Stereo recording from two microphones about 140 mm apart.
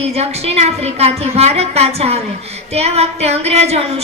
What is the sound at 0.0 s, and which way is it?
A woman's voice, 45° right (ahead or behind).